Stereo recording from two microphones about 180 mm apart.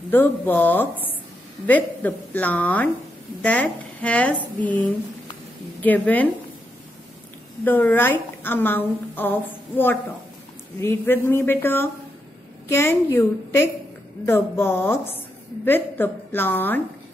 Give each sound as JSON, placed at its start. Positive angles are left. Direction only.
{"t": 0.1, "sound": "a woman's voice", "side_deg": 10}
{"t": 5.8, "sound": "a woman's voice", "side_deg": 10}
{"t": 7.6, "sound": "a woman's voice", "side_deg": 10}